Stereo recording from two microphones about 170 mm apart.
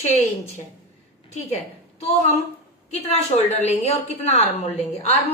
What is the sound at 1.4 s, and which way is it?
A woman's voice, 40° left (ahead or behind).